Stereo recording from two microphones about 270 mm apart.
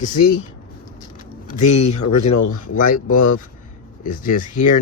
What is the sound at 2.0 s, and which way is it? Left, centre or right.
Speech, left.